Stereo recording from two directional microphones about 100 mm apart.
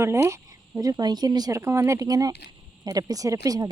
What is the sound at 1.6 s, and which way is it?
Speech, 30° right (ahead or behind).